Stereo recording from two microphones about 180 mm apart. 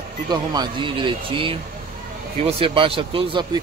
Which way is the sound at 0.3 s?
25° right (ahead or behind).